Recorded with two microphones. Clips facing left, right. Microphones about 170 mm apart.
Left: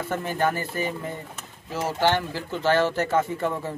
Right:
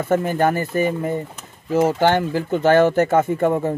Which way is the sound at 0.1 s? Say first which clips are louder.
Right 8 dB; 45° right (ahead or behind).